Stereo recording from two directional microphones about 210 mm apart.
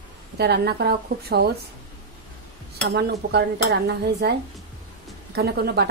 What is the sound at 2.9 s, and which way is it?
Speech, 50° right (ahead or behind).